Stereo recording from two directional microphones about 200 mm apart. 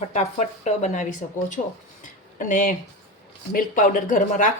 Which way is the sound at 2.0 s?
40° left (ahead or behind).